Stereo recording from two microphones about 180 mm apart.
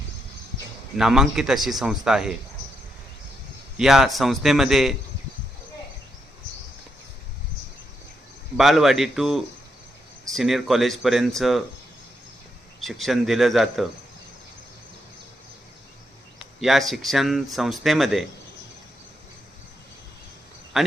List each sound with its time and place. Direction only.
0.9 s speech: 5° right (ahead or behind)
3.8 s speech: centre (ahead or behind)
8.5 s speech: centre (ahead or behind)
12.8 s speech: centre (ahead or behind)
16.6 s speech: centre (ahead or behind)
20.7 s speech: centre (ahead or behind)